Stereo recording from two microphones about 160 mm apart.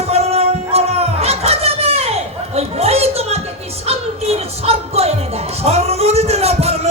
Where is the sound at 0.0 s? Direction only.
40° right (ahead or behind).